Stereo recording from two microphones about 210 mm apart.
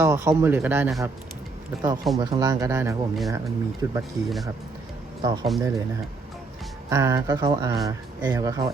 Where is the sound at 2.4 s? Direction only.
15° right (ahead or behind).